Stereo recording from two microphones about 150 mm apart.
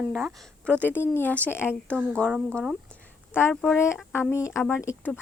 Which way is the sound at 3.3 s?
15° left (ahead or behind).